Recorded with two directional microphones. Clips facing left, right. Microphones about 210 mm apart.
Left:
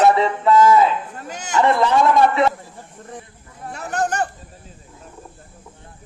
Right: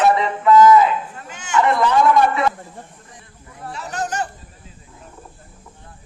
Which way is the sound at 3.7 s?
55° left (ahead or behind).